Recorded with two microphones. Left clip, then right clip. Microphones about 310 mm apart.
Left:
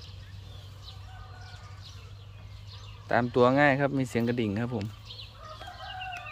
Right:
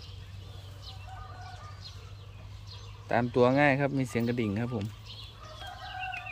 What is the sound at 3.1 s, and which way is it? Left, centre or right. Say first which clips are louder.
Speech: left 2 dB; centre.